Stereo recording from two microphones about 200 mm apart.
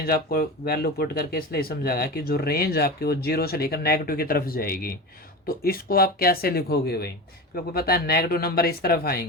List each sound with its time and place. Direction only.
0.0 s speech: 50° left (ahead or behind)